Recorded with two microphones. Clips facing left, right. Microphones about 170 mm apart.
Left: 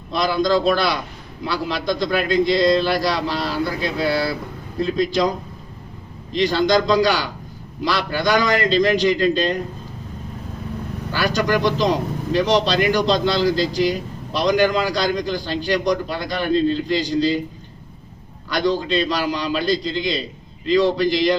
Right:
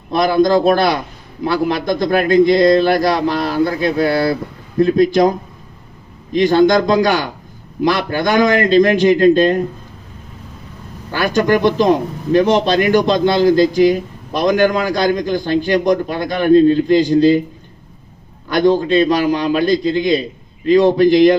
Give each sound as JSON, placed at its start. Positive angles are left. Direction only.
{"t": 0.1, "sound": "a man's voice", "side_deg": -50}
{"t": 6.3, "sound": "a man's voice", "side_deg": -50}
{"t": 11.1, "sound": "a man's voice", "side_deg": -50}
{"t": 18.4, "sound": "a man's voice", "side_deg": -50}